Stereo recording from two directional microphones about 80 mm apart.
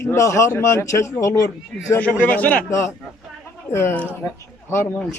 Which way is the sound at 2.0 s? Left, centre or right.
Left.